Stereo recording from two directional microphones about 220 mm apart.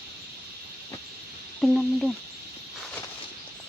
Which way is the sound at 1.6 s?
Centre (ahead or behind).